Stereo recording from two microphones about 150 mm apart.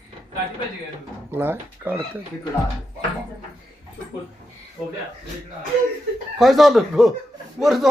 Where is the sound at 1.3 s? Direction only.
15° right (ahead or behind).